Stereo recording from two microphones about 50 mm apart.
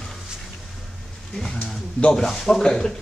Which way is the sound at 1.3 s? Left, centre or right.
Centre.